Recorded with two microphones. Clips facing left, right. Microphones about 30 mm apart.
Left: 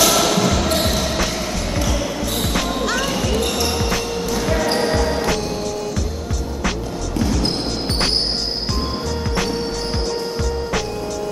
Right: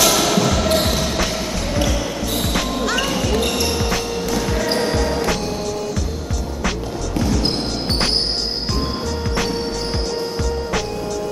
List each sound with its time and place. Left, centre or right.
0.0 s basketball bounce: centre